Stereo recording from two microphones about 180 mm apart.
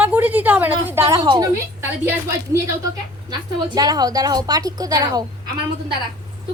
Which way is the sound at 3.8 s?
20° right (ahead or behind).